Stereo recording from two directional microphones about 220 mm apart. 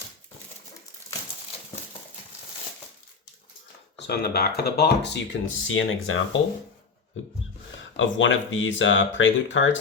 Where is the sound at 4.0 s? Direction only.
45° left (ahead or behind).